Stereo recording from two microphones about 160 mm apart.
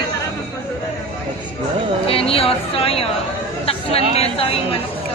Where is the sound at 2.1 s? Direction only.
35° left (ahead or behind).